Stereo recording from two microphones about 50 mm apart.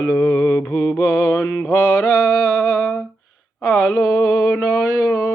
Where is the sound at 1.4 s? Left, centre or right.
Left.